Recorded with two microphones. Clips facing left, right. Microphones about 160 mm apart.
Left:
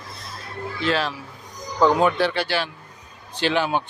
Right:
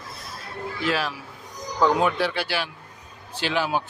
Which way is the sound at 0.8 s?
5° right (ahead or behind).